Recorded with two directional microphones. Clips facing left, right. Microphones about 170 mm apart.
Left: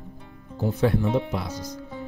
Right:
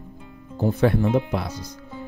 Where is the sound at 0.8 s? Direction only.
60° right (ahead or behind).